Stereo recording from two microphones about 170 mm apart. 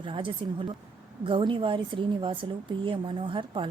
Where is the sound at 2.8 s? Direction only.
30° right (ahead or behind).